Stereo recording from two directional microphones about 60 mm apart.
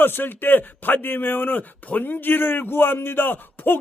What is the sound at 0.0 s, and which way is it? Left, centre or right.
A man's voice, left.